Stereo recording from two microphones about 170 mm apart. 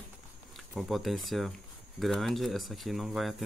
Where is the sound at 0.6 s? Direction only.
Centre (ahead or behind).